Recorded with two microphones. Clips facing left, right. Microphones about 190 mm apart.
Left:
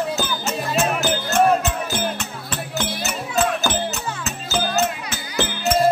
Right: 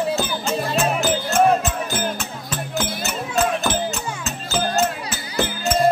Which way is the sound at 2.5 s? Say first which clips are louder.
Right 1 dB; centre (ahead or behind).